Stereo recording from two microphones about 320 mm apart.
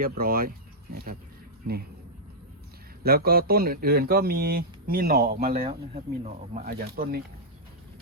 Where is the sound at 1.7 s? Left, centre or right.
Right.